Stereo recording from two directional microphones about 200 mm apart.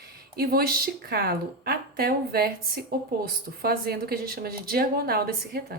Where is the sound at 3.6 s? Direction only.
50° right (ahead or behind).